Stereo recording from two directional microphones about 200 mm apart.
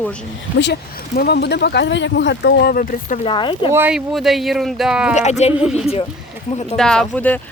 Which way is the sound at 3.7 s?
10° right (ahead or behind).